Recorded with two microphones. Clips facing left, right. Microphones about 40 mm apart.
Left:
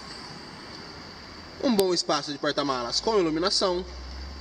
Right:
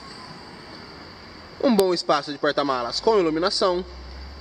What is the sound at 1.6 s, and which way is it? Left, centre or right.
A man's voice, centre.